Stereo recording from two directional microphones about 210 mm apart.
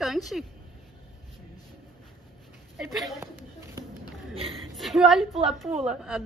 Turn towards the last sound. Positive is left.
turn(degrees=-5)  # may be behind; listen again after turning